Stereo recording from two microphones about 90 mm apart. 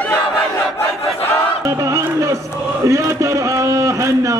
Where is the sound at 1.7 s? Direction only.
35° right (ahead or behind).